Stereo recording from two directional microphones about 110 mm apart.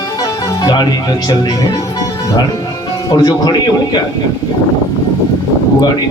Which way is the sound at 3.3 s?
40° left (ahead or behind).